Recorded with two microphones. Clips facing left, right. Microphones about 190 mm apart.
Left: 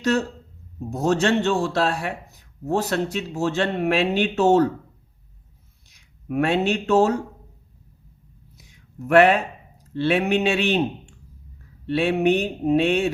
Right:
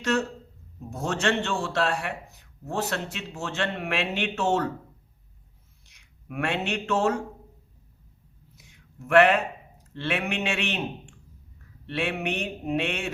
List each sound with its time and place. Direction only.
0.0 s speech: 35° left (ahead or behind)
5.9 s speech: 35° left (ahead or behind)
8.5 s a sound: 40° left (ahead or behind)
9.9 s speech: 35° left (ahead or behind)